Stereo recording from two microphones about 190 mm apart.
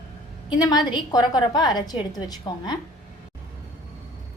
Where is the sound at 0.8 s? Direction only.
25° left (ahead or behind).